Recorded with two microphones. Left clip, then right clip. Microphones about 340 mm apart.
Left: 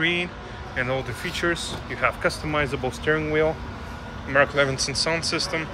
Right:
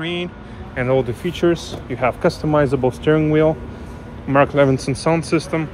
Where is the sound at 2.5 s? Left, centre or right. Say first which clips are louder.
Right 8 dB; right.